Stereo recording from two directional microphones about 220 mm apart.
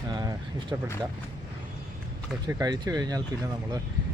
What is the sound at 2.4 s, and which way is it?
Speech, 15° right (ahead or behind).